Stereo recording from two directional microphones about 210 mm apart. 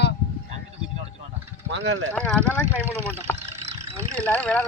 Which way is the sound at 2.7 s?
10° right (ahead or behind).